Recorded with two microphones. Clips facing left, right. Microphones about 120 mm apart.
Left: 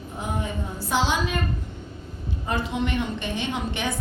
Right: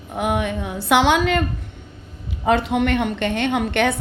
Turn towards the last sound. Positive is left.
turn(degrees=-65)  # may be behind; listen again after turning